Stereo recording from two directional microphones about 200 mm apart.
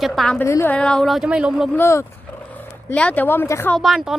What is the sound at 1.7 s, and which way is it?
Speech, 15° left (ahead or behind).